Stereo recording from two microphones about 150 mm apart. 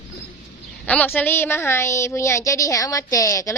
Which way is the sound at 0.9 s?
10° left (ahead or behind).